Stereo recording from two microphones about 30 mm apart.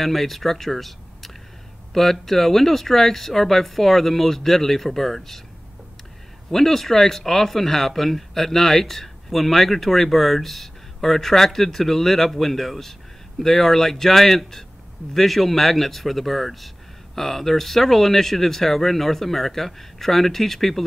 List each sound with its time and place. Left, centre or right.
0.0 s speech: centre
6.5 s speech: centre